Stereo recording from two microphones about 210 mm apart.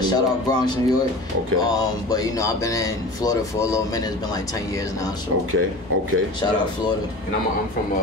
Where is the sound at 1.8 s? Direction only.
15° left (ahead or behind).